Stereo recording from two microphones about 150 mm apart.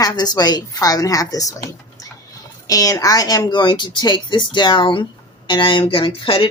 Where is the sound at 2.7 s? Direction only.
25° left (ahead or behind).